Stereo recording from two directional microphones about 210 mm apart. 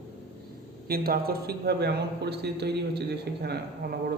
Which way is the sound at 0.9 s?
45° right (ahead or behind).